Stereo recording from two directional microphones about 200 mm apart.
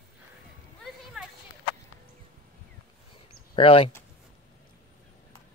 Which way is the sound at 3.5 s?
25° left (ahead or behind).